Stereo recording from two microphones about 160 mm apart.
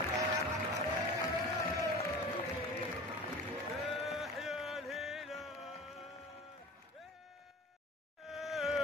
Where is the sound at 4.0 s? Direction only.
Centre (ahead or behind).